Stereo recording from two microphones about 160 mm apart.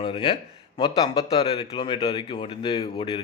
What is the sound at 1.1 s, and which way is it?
A man's voice, 35° left (ahead or behind).